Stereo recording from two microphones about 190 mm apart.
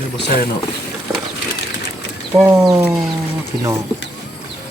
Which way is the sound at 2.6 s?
15° right (ahead or behind).